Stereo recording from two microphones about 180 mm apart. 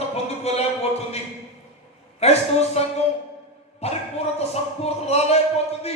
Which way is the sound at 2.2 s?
35° left (ahead or behind).